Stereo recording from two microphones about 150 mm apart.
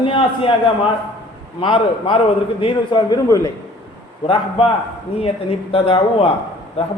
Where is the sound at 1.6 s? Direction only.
35° left (ahead or behind).